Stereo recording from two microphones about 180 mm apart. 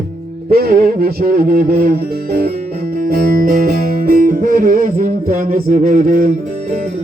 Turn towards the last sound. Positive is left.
turn(degrees=-45)  # may be behind; listen again after turning